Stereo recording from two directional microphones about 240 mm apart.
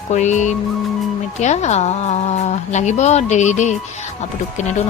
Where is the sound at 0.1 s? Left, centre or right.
Left.